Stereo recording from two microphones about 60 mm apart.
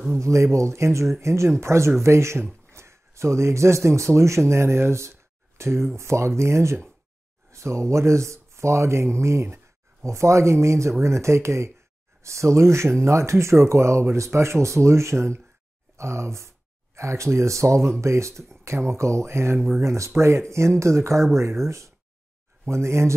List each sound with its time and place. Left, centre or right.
0.2 s a man's voice: right